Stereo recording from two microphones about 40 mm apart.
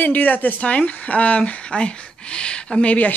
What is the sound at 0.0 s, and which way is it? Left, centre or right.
Speech, left.